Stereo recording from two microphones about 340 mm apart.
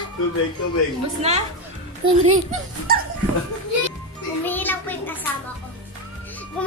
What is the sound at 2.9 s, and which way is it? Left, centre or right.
Speech, right.